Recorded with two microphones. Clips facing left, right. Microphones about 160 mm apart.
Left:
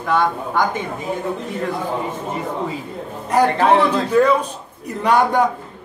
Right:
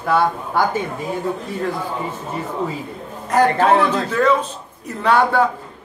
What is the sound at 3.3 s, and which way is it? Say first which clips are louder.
A man's voice: even; 10° left (ahead or behind).